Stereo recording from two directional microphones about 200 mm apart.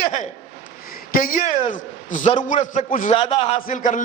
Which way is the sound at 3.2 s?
30° left (ahead or behind).